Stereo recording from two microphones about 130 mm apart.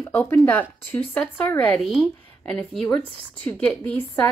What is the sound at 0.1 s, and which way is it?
A woman's voice, 15° left (ahead or behind).